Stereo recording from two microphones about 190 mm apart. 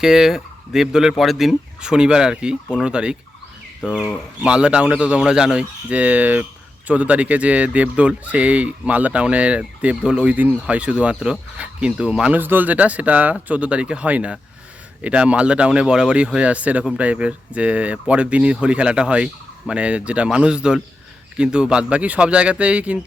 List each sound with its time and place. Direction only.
0.0 s speech: centre (ahead or behind)